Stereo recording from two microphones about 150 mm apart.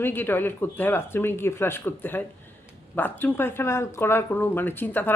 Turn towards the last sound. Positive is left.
turn(degrees=10)  # may be behind; listen again after turning